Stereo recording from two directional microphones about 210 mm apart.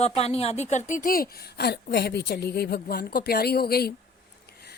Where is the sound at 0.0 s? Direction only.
30° left (ahead or behind).